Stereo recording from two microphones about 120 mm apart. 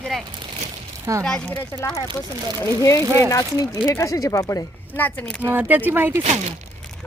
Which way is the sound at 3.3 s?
30° left (ahead or behind).